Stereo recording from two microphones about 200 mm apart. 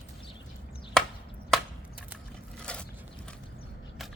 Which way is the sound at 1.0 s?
5° left (ahead or behind).